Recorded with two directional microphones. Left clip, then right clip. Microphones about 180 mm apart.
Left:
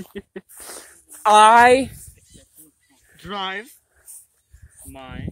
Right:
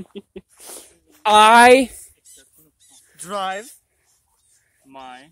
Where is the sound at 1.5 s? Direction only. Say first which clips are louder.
Right 2 dB; 35° right (ahead or behind).